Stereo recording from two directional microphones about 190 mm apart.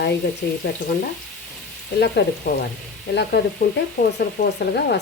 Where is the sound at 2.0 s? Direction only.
60° left (ahead or behind).